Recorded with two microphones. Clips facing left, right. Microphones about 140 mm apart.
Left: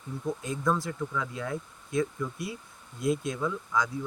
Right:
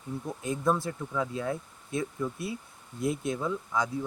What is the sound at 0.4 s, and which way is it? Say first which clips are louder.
Speech: right 3 dB; 25° right (ahead or behind).